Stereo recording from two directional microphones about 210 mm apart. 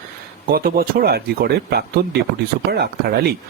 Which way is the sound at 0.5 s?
45° right (ahead or behind).